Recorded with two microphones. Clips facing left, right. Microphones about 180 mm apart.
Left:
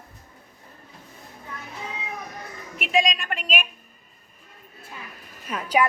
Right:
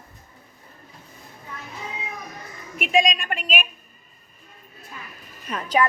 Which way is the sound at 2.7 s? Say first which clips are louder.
Right 2 dB; 15° right (ahead or behind).